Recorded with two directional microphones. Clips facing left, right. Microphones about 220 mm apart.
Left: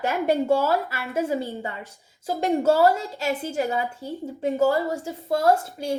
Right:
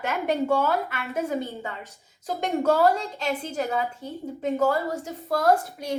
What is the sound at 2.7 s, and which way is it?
Speech, 5° left (ahead or behind).